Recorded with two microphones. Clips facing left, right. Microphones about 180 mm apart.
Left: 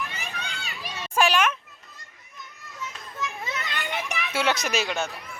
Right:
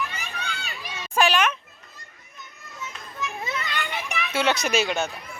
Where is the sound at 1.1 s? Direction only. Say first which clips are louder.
Right 1 dB; 10° left (ahead or behind).